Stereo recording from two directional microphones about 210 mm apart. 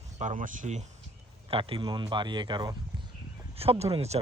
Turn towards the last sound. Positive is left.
turn(degrees=-30)  # may be behind; listen again after turning